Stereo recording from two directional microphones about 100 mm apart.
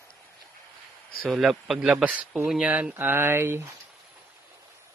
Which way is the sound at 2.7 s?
20° right (ahead or behind).